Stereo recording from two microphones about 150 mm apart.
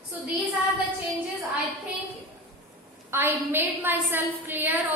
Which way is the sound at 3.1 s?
15° right (ahead or behind).